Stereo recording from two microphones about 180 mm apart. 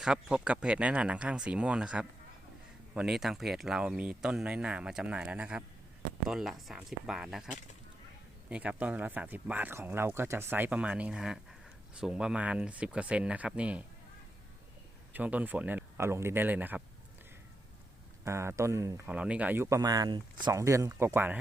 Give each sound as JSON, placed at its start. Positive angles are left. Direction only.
{"t": 0.0, "sound": "speech", "side_deg": -5}
{"t": 15.1, "sound": "speech", "side_deg": -10}
{"t": 18.3, "sound": "speech", "side_deg": -15}